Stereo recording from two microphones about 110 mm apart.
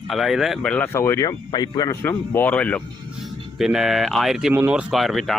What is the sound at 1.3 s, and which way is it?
Speech, 35° left (ahead or behind).